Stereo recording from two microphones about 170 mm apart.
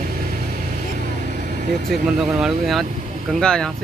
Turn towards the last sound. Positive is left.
turn(degrees=5)  # may be behind; listen again after turning